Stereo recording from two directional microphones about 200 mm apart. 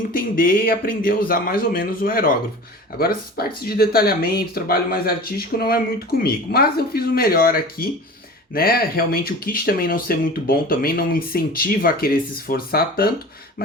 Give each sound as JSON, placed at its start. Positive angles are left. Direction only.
{"t": 0.1, "sound": "speech", "side_deg": 45}